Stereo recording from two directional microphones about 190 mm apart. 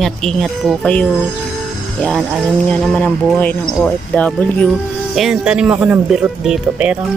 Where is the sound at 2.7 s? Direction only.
5° left (ahead or behind).